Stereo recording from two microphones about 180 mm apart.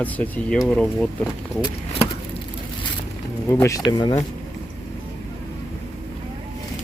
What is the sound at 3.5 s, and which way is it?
Speech, 15° left (ahead or behind).